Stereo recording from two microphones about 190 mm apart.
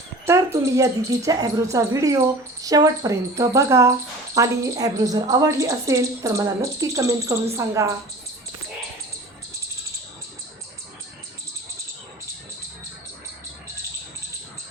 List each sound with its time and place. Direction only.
0.3 s speech: 15° right (ahead or behind)